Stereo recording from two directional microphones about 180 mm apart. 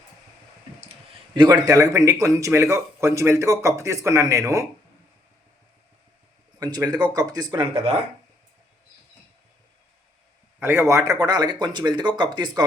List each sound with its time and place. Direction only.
1.3 s speech: 25° right (ahead or behind)
6.6 s speech: 20° right (ahead or behind)
10.6 s speech: 15° right (ahead or behind)